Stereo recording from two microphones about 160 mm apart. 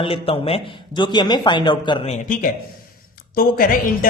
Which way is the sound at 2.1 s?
55° left (ahead or behind).